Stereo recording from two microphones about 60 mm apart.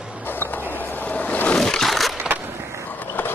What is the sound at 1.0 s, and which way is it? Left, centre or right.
Ocean, left.